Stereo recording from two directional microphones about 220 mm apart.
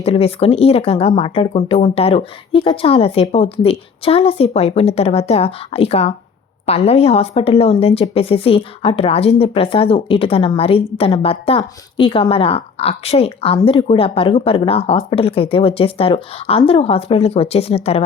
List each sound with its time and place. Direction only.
0.0 s speech: 25° left (ahead or behind)